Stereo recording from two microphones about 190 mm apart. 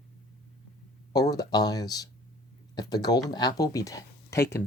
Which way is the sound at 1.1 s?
20° left (ahead or behind).